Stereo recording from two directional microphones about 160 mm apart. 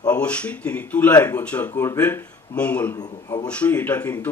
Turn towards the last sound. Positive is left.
turn(degrees=10)  # may be behind; listen again after turning